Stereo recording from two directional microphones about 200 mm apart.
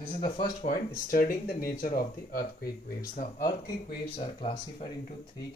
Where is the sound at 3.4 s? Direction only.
20° left (ahead or behind).